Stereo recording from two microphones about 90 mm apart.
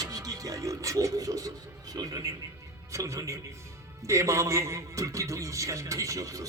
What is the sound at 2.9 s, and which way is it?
A man's voice, 35° right (ahead or behind).